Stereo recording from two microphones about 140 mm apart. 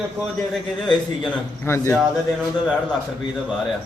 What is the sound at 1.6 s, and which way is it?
Speech, 20° left (ahead or behind).